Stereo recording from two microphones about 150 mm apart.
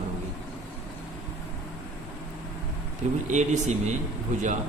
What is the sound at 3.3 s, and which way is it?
A man's voice, 50° right (ahead or behind).